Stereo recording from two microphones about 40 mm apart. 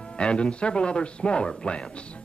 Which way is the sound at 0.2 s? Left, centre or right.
Left.